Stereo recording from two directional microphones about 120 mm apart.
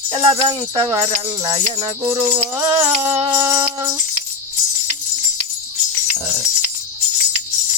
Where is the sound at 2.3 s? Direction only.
50° right (ahead or behind).